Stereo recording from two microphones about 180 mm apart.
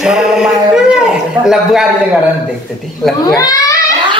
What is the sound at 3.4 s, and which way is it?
Speech, 20° left (ahead or behind).